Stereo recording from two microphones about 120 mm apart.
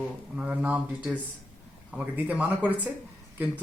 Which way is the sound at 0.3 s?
10° right (ahead or behind).